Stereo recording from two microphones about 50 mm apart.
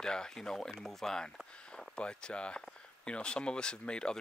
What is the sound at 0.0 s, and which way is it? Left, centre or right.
Speech, centre.